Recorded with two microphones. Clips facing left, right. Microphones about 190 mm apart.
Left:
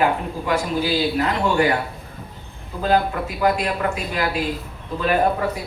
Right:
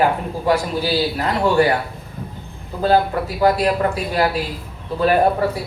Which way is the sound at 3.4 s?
35° right (ahead or behind).